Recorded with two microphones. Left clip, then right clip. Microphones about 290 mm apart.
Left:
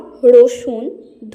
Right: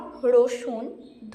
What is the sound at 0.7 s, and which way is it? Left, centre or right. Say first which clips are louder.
Speech: left 8 dB; right.